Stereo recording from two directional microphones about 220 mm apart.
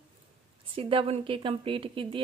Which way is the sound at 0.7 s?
25° right (ahead or behind).